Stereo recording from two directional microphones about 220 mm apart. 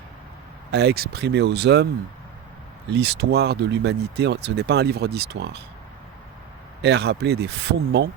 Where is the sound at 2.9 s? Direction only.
50° right (ahead or behind).